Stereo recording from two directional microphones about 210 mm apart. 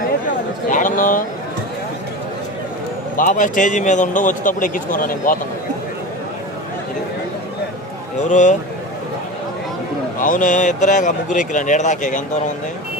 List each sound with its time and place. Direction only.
0.7 s a man's voice: 40° left (ahead or behind)
3.2 s a man's voice: 40° left (ahead or behind)
8.3 s a man's voice: 35° left (ahead or behind)
10.2 s a man's voice: 40° left (ahead or behind)